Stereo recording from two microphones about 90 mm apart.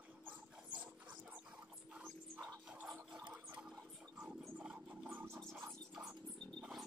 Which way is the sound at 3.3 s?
15° right (ahead or behind).